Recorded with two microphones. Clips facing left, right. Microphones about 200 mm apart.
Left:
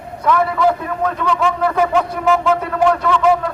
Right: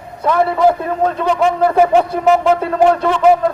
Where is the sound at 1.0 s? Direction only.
30° right (ahead or behind).